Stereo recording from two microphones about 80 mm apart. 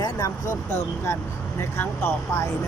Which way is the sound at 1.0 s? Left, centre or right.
Left.